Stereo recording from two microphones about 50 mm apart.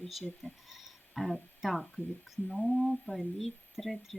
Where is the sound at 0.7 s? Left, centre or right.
Centre.